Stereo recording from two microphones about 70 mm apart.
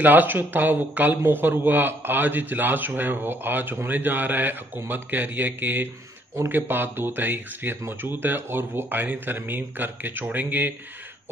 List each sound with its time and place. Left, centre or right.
0.0 s a man's voice: right